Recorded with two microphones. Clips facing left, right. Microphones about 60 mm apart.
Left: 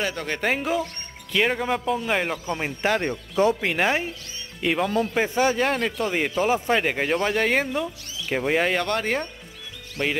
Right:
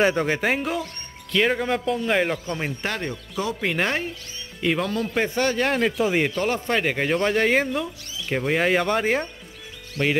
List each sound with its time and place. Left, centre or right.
0.0 s speech: centre
0.4 s a man's voice: centre
3.0 s speech: left
3.6 s a man's voice: centre
5.7 s speech: centre
6.3 s speech: centre